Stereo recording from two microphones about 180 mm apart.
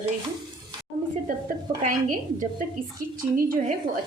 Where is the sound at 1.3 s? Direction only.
50° right (ahead or behind).